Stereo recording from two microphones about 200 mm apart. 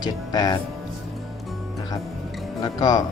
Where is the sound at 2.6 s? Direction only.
20° left (ahead or behind).